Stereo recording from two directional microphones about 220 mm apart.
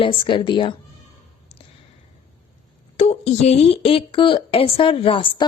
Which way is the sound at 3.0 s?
30° left (ahead or behind).